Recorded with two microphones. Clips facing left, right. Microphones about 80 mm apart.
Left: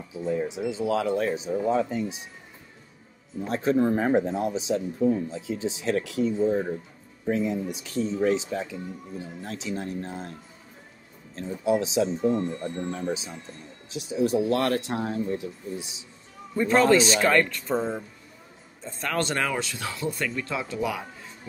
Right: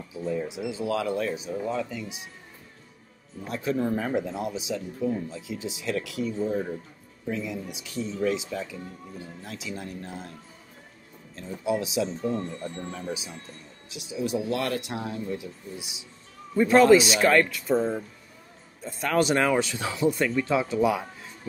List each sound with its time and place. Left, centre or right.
0.1 s speech: centre; by 2.1 s left
3.4 s speech: left
7.2 s speech: left
11.8 s speech: left
12.2 s speech: centre
12.9 s speech: left
16.5 s speech: centre